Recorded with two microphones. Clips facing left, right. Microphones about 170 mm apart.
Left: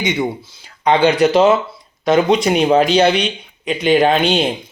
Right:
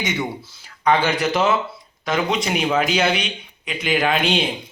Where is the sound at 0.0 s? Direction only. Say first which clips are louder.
Left 6 dB; 25° left (ahead or behind).